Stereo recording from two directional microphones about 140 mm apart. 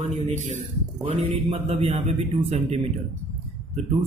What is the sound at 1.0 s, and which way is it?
A man's voice, 45° right (ahead or behind).